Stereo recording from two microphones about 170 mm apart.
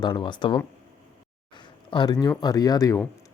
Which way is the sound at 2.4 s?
25° left (ahead or behind).